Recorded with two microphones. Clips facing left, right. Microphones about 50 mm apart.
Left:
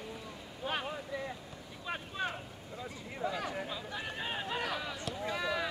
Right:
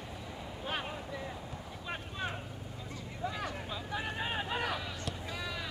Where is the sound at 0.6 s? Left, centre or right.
Centre.